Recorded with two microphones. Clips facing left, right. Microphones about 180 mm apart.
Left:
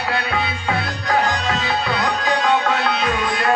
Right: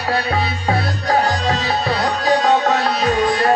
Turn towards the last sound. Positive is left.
turn(degrees=-35)  # may be behind; listen again after turning